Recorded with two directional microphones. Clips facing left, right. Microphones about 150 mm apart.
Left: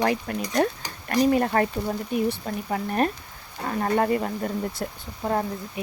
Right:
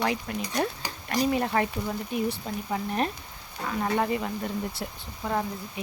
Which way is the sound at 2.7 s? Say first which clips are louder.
Left 4 dB; 50° left (ahead or behind).